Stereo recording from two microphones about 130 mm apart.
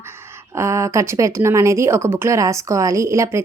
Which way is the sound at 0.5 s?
20° right (ahead or behind).